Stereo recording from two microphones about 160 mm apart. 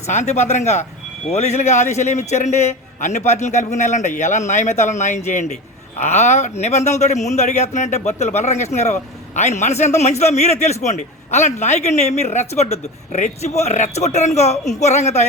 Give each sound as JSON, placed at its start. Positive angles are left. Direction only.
{"t": 0.1, "sound": "a man's voice", "side_deg": 45}